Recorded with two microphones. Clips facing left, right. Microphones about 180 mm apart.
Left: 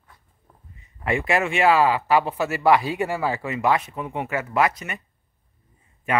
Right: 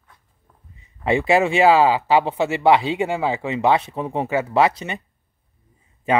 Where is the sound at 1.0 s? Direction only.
30° right (ahead or behind).